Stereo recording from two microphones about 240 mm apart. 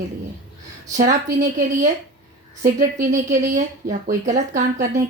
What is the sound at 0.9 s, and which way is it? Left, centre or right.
Speech, right.